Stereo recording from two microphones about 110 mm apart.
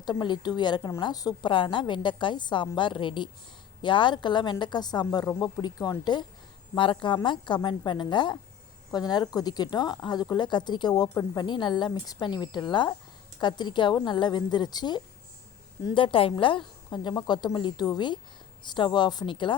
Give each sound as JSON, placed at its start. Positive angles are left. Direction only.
{"t": 0.0, "sound": "a woman's voice", "side_deg": 40}
{"t": 16.0, "sound": "a woman's voice", "side_deg": 50}